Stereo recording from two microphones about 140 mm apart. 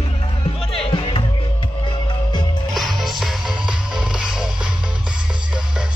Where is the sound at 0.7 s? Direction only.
40° left (ahead or behind).